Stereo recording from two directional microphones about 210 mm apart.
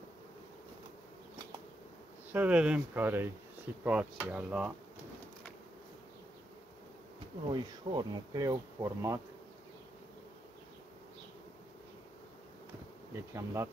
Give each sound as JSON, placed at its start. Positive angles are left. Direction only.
{"t": 2.3, "sound": "speech", "side_deg": -5}
{"t": 7.4, "sound": "speech", "side_deg": -20}
{"t": 13.1, "sound": "speech", "side_deg": -15}